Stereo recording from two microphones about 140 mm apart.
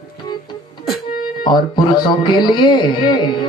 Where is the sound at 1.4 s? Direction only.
30° left (ahead or behind).